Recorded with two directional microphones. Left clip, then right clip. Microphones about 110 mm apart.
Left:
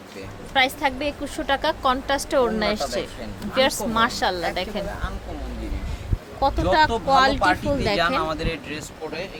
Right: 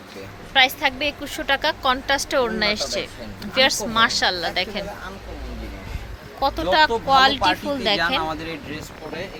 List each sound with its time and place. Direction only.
0.5 s a woman's voice: 20° left (ahead or behind)
6.4 s speech: 15° left (ahead or behind)
8.2 s a woman's voice: 30° left (ahead or behind)